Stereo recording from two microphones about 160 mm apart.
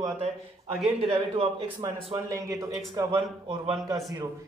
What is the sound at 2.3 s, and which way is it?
Speech, 20° right (ahead or behind).